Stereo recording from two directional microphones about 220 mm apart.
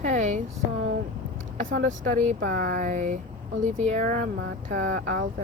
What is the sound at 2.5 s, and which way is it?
Speech, 40° right (ahead or behind).